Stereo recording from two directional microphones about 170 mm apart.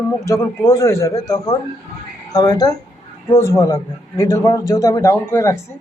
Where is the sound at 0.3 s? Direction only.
20° left (ahead or behind).